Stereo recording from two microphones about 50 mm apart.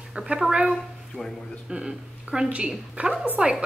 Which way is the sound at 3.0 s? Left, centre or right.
Right.